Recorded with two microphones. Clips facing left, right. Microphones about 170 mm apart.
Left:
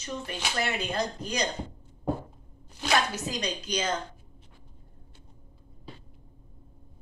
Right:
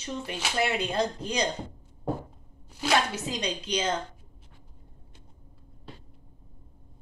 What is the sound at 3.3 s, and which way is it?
Speech, 30° right (ahead or behind).